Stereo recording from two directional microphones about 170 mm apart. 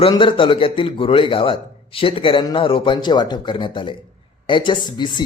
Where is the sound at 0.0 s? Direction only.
30° left (ahead or behind).